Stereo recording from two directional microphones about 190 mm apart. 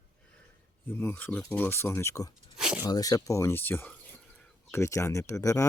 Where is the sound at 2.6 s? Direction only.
5° right (ahead or behind).